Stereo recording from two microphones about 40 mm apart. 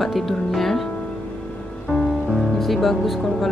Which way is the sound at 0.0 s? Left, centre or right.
Centre.